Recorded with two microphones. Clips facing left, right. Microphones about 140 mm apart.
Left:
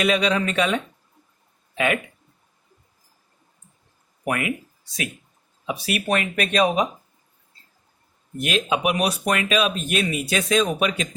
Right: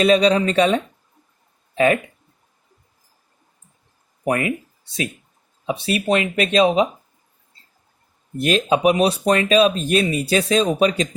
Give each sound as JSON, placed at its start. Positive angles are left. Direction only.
{"t": 0.0, "sound": "speech", "side_deg": -35}
{"t": 4.2, "sound": "speech", "side_deg": -30}
{"t": 8.4, "sound": "speech", "side_deg": -35}